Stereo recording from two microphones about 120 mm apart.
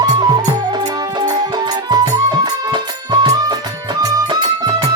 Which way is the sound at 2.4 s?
35° right (ahead or behind).